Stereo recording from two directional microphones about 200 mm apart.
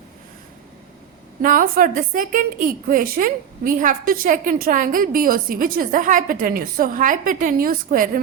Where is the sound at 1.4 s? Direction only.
45° right (ahead or behind).